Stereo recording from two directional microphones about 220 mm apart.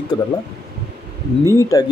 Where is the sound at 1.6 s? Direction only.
15° left (ahead or behind).